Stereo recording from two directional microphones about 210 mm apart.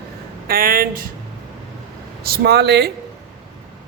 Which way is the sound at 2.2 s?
50° right (ahead or behind).